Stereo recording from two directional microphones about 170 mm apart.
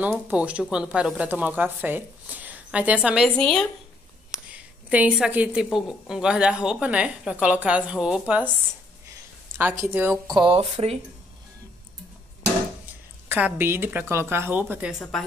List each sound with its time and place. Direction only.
0.3 s a woman's voice: 5° right (ahead or behind)
9.6 s speech: 10° right (ahead or behind)
10.3 s speech: 30° right (ahead or behind)
12.8 s speech: 10° right (ahead or behind)